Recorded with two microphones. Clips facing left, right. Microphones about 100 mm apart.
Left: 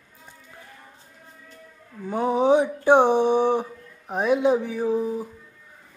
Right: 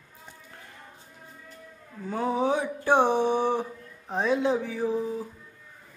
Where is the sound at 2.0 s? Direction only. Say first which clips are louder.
Left 6 dB; 20° left (ahead or behind).